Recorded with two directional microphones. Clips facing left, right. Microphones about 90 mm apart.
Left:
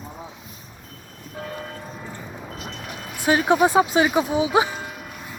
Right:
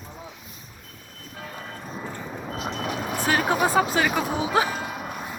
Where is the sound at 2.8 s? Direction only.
90° right.